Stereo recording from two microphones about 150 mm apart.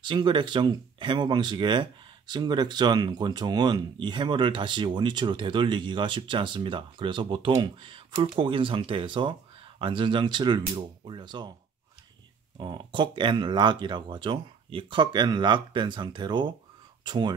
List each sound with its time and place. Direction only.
0.0 s speech: 30° right (ahead or behind)
12.5 s speech: 30° right (ahead or behind)